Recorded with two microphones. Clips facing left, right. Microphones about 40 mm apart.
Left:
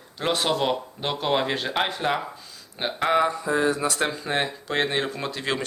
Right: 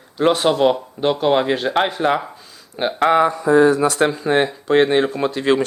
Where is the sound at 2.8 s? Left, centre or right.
Right.